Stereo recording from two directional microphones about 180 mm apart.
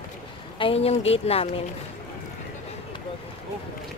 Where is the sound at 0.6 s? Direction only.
30° left (ahead or behind).